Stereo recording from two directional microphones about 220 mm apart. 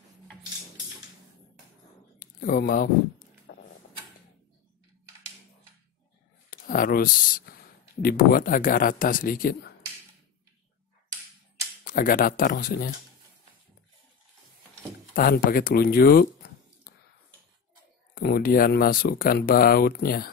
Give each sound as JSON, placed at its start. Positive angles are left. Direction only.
{"t": 2.1, "sound": "a sound", "side_deg": 40}
{"t": 6.5, "sound": "speech", "side_deg": 40}
{"t": 11.8, "sound": "speech", "side_deg": 40}
{"t": 15.1, "sound": "speech", "side_deg": 40}
{"t": 16.9, "sound": "a sound", "side_deg": 40}
{"t": 18.1, "sound": "speech", "side_deg": 45}